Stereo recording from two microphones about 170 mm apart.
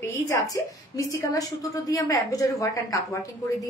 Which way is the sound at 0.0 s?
20° left (ahead or behind).